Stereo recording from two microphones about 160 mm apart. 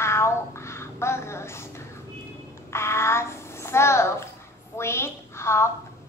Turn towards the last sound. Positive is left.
turn(degrees=15)  # may be behind; listen again after turning